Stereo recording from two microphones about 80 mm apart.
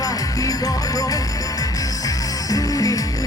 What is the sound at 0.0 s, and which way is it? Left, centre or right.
Music, left.